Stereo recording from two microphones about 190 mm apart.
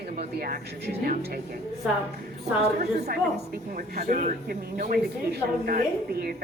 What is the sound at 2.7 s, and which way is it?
Speech, 45° right (ahead or behind).